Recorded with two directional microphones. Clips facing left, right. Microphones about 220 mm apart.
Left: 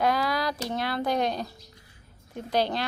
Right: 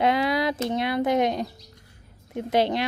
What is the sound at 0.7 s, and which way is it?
Speech, 20° right (ahead or behind).